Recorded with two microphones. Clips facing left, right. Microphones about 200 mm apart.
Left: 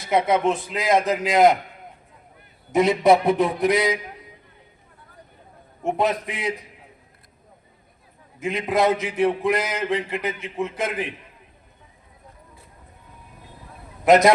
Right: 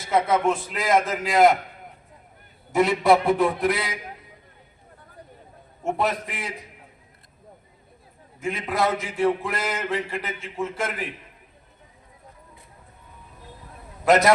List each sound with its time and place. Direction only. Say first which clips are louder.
0.1 s a man's voice: left 1 dB; 20° left (ahead or behind)
2.7 s a man's voice: left 2 dB; 20° left (ahead or behind)
6.0 s a man's voice: left 4 dB; 20° left (ahead or behind)
8.4 s a man's voice: left 4 dB; 20° left (ahead or behind)
14.0 s a man's voice: left 3 dB; 20° left (ahead or behind)